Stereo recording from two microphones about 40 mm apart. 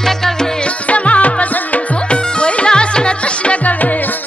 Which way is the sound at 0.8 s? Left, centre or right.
Left.